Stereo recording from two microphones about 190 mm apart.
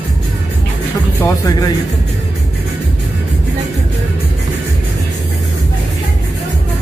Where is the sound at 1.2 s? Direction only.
20° left (ahead or behind).